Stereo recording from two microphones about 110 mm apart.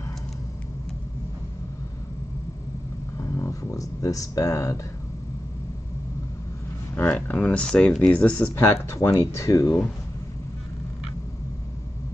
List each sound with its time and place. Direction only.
3.2 s a sound: 30° left (ahead or behind)
7.0 s speech: 15° left (ahead or behind)
8.5 s speech: 25° left (ahead or behind)